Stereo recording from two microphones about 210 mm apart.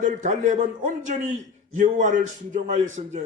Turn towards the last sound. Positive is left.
turn(degrees=-35)  # may be behind; listen again after turning